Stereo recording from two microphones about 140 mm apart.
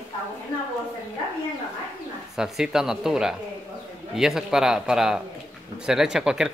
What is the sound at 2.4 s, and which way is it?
A man's voice, 5° right (ahead or behind).